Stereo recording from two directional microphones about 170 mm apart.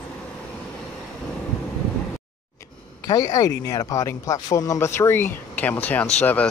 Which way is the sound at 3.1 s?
20° left (ahead or behind).